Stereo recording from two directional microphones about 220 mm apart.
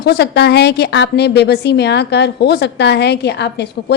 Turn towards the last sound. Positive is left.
turn(degrees=50)  # may be behind; listen again after turning